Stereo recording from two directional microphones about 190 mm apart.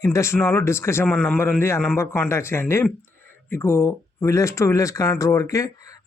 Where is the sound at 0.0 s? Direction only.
15° left (ahead or behind).